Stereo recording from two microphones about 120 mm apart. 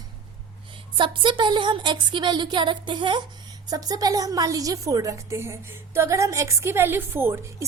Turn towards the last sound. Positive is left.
turn(degrees=-20)  # may be behind; listen again after turning